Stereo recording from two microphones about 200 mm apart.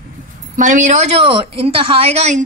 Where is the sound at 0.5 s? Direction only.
40° right (ahead or behind).